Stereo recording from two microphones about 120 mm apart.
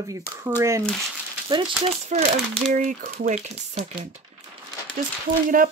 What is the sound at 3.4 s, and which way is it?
Speech, 70° right (ahead or behind).